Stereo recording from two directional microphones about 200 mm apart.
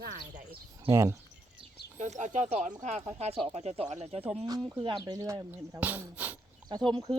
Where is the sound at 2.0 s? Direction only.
35° right (ahead or behind); by 6.4 s 10° right (ahead or behind).